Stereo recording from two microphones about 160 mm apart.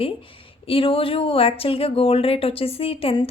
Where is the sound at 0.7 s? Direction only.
35° left (ahead or behind).